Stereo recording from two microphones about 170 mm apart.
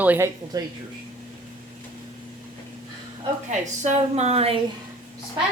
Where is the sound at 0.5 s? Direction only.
20° right (ahead or behind).